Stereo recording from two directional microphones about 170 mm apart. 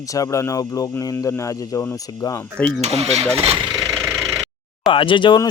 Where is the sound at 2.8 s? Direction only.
40° right (ahead or behind).